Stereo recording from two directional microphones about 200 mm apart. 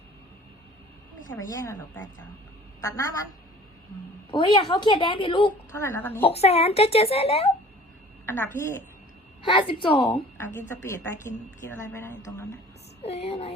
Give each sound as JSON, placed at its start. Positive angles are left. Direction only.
{"t": 1.3, "sound": "a woman's voice", "side_deg": 15}
{"t": 2.8, "sound": "a woman's voice", "side_deg": 15}
{"t": 4.3, "sound": "a woman's voice", "side_deg": 25}
{"t": 5.7, "sound": "a woman's voice", "side_deg": 10}
{"t": 6.2, "sound": "speech", "side_deg": 30}
{"t": 8.3, "sound": "a woman's voice", "side_deg": 15}
{"t": 9.4, "sound": "a woman's voice", "side_deg": 25}
{"t": 13.0, "sound": "speech", "side_deg": 30}